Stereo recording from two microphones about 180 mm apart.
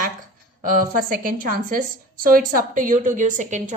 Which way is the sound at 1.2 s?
50° right (ahead or behind).